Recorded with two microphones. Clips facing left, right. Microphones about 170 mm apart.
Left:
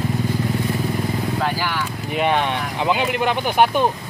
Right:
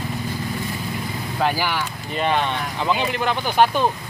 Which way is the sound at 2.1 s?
10° left (ahead or behind).